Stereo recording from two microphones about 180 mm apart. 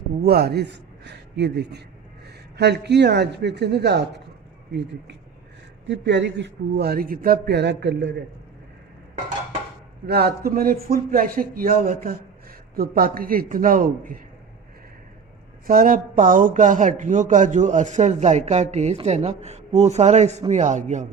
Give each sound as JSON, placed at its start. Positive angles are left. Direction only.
{"t": 0.2, "sound": "a man's voice", "side_deg": -60}
{"t": 5.9, "sound": "a man's voice", "side_deg": -80}
{"t": 10.1, "sound": "a man's voice", "side_deg": -60}
{"t": 15.6, "sound": "speech", "side_deg": -50}